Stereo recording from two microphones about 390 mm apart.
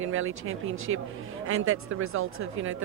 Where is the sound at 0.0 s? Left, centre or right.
Right.